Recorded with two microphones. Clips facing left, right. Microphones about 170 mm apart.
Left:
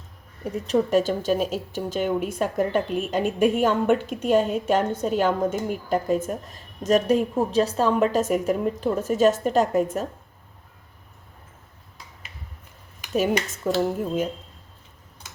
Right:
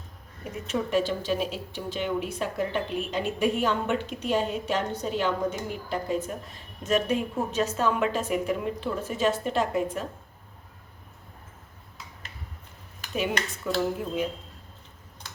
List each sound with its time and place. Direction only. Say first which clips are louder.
0.7 s a woman's voice: left 5 dB; 45° left (ahead or behind)
13.1 s a woman's voice: left 6 dB; 40° left (ahead or behind)